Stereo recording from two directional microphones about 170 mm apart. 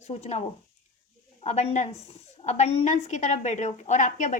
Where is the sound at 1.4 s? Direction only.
40° left (ahead or behind).